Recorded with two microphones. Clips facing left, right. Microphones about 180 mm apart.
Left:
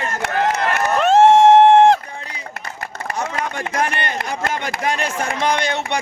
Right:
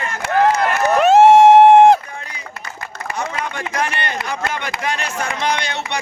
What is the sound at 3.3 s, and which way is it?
Speech, 45° left (ahead or behind).